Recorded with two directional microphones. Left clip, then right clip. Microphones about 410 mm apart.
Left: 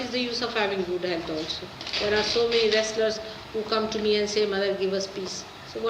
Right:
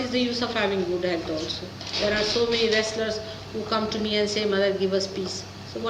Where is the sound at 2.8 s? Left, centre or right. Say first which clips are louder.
Left 1 dB; centre.